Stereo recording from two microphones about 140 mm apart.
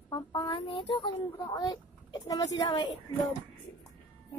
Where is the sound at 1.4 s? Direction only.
30° left (ahead or behind).